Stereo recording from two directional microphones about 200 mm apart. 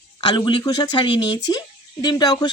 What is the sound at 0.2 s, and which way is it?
Speech, 25° left (ahead or behind).